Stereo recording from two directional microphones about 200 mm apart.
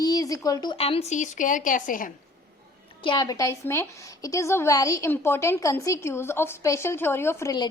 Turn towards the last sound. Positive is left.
turn(degrees=20)  # may be behind; listen again after turning